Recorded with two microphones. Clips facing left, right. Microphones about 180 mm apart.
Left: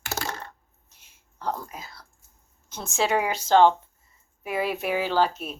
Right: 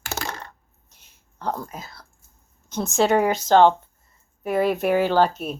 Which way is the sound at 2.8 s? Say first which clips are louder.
Right 6 dB; 45° right (ahead or behind).